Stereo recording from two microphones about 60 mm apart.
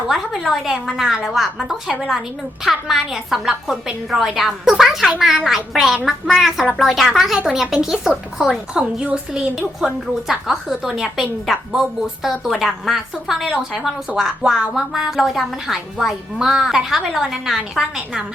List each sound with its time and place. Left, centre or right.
0.1 s a woman's voice: centre